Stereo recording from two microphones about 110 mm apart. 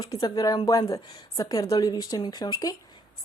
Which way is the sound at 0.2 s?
35° left (ahead or behind).